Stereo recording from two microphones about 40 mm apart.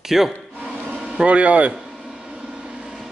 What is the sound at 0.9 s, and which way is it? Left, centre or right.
Speech, right.